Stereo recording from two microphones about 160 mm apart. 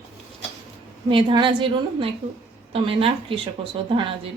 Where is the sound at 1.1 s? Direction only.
30° right (ahead or behind).